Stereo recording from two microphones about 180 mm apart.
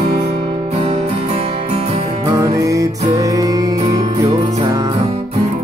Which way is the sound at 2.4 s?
20° right (ahead or behind).